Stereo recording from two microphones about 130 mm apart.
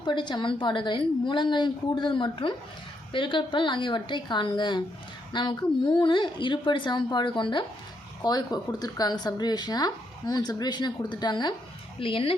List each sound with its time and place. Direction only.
0.0 s speech: 35° left (ahead or behind)